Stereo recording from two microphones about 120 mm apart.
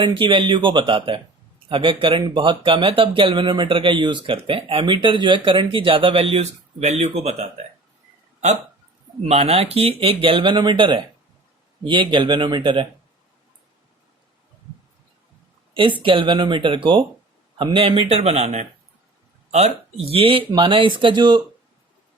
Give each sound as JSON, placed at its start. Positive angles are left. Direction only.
{"t": 0.0, "sound": "speech", "side_deg": -45}
{"t": 9.2, "sound": "speech", "side_deg": -60}
{"t": 15.7, "sound": "speech", "side_deg": -45}